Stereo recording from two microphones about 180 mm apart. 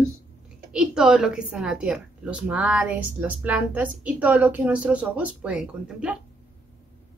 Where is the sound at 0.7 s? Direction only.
5° right (ahead or behind).